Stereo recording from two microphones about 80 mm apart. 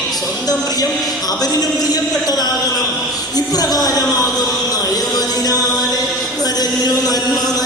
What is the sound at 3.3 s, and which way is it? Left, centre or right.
Speech, left.